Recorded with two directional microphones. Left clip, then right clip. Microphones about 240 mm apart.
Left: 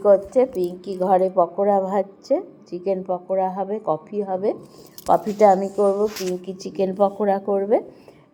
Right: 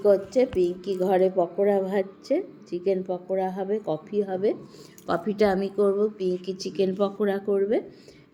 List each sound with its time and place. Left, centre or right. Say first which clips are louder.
0.0 s a woman's voice: left 5 dB; centre
0.6 s a woman's voice: left 1 dB; centre
5.0 s speech: left 8 dB; centre
5.7 s a woman's voice: left 4 dB; right
6.4 s a woman's voice: left 2 dB; centre